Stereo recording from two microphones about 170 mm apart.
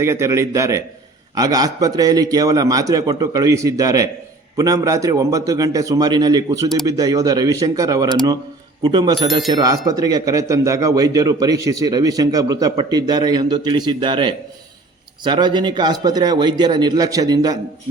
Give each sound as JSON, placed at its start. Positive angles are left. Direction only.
{"t": 0.0, "sound": "a man's voice", "side_deg": -15}